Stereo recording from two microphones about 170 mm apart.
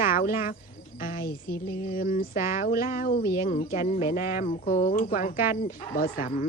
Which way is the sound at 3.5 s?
50° left (ahead or behind).